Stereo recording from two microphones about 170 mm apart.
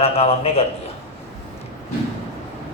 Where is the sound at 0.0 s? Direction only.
35° left (ahead or behind).